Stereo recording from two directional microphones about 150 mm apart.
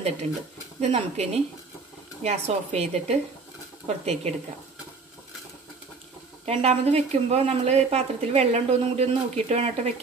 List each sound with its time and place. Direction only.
0.7 s speech: 45° right (ahead or behind)
6.4 s speech: 45° right (ahead or behind)